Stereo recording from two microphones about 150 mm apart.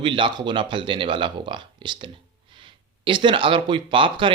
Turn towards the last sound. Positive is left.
turn(degrees=-35)  # may be behind; listen again after turning